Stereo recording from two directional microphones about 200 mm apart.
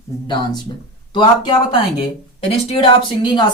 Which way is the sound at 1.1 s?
25° left (ahead or behind).